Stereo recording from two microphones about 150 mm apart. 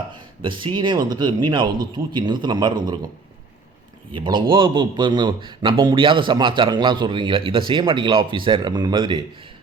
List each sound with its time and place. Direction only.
0.8 s speech: 30° right (ahead or behind)
4.1 s speech: 30° right (ahead or behind)